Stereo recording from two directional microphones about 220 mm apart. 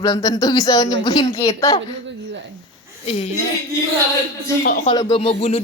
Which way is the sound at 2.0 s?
55° right (ahead or behind).